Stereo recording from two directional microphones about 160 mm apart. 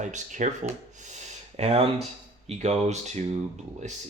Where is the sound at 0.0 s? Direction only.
50° right (ahead or behind).